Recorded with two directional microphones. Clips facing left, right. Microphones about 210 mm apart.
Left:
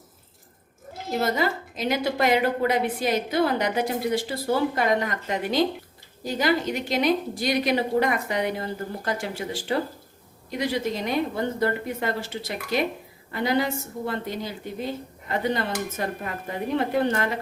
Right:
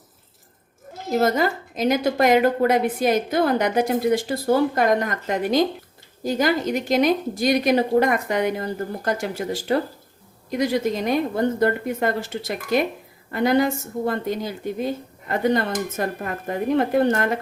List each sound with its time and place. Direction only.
1.1 s a woman's voice: 45° right (ahead or behind)